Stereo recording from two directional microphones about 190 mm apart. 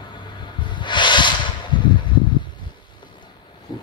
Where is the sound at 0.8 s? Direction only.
25° left (ahead or behind).